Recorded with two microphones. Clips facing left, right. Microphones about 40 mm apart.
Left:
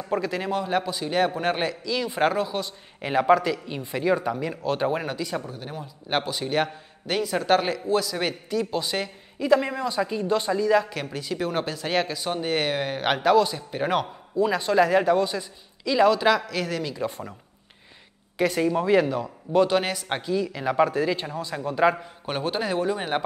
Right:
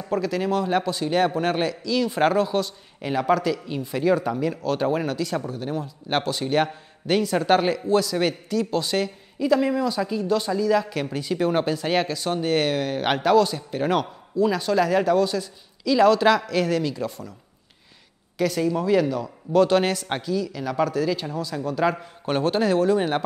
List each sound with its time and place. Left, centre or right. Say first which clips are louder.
0.1 s a man's voice: right 3 dB; centre
3.0 s a man's voice: left 2 dB; centre
10.9 s a man's voice: right 4 dB; centre
18.4 s speech: even; left
19.7 s a man's voice: right 3 dB; centre
20.2 s speech: even; left
21.9 s a man's voice: right 5 dB; centre